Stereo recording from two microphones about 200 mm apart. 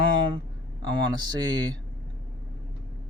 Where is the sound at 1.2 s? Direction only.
20° right (ahead or behind).